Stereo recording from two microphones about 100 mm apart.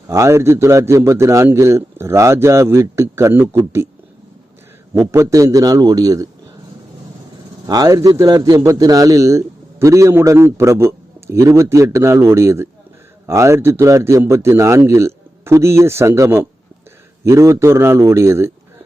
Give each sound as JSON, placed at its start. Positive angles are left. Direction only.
{"t": 0.1, "sound": "a man's voice", "side_deg": -30}
{"t": 4.9, "sound": "a man's voice", "side_deg": -30}
{"t": 7.7, "sound": "a man's voice", "side_deg": -40}